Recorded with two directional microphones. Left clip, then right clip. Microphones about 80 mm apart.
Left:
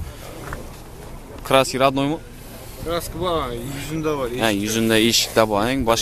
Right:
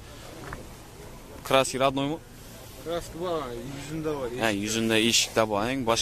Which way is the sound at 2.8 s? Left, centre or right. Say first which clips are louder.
Left 7 dB; left.